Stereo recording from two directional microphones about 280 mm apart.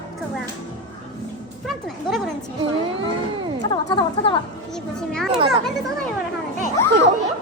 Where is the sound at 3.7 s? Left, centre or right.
Centre.